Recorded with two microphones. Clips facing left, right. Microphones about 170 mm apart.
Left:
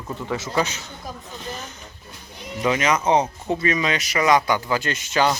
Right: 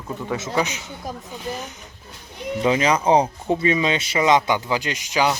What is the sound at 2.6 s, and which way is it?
Speech, 30° right (ahead or behind).